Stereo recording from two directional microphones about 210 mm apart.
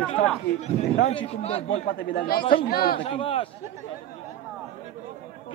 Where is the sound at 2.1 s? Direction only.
45° left (ahead or behind).